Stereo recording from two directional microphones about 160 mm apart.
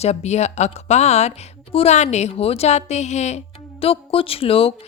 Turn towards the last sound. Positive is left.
turn(degrees=35)  # may be behind; listen again after turning